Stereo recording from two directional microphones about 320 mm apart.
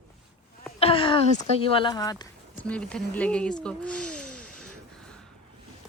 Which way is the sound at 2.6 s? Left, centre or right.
Centre.